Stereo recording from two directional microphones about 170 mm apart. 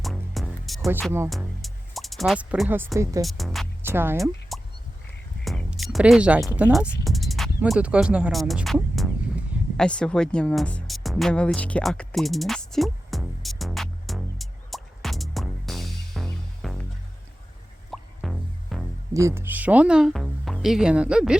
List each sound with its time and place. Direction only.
0.0 s music: centre (ahead or behind)
1.3 s speech: centre (ahead or behind); by 3.2 s 20° right (ahead or behind)
3.2 s speech: centre (ahead or behind)
3.8 s speech: 15° right (ahead or behind)
4.2 s a sound: centre (ahead or behind)
5.5 s speech: centre (ahead or behind)
9.7 s music: 5° left (ahead or behind)
17.9 s music: centre (ahead or behind)
19.1 s speech: 15° right (ahead or behind)